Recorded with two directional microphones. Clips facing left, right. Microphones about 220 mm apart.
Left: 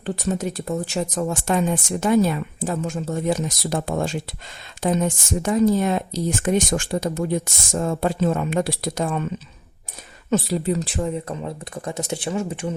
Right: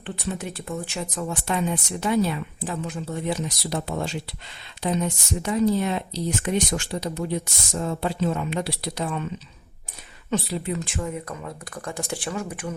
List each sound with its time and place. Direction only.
0.0 s speech: 40° left (ahead or behind)
10.2 s speech: 45° left (ahead or behind); by 12.7 s 25° left (ahead or behind)